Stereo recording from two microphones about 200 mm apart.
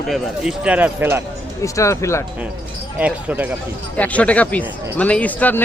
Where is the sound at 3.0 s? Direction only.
10° right (ahead or behind).